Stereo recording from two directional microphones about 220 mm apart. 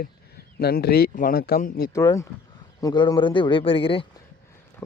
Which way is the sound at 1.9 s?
15° left (ahead or behind).